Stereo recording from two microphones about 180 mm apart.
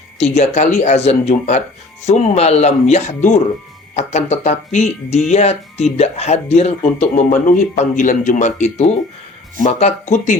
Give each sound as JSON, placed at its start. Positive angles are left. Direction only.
{"t": 0.2, "sound": "speech", "side_deg": 35}